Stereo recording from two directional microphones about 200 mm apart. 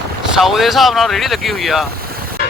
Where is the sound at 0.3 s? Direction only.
Centre (ahead or behind).